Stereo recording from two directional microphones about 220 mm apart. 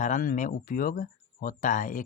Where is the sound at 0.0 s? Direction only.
35° left (ahead or behind).